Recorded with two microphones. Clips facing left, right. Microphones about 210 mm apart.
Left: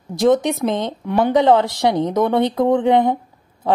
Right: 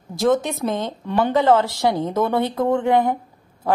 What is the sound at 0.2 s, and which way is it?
A woman's voice, 15° left (ahead or behind).